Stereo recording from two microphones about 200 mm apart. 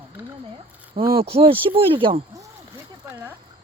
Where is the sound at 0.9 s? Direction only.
30° right (ahead or behind).